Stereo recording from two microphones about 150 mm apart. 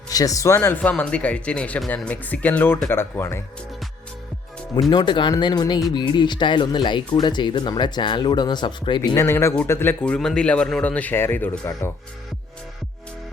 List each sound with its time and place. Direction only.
0.1 s speech: 25° left (ahead or behind)
4.9 s speech: 30° left (ahead or behind)
9.1 s speech: 15° left (ahead or behind)